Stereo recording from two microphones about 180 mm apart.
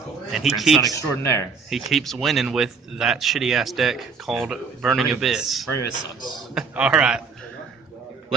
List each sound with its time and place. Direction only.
0.3 s speech: centre (ahead or behind)
0.9 s speech: 15° left (ahead or behind)
1.7 s speech: centre (ahead or behind)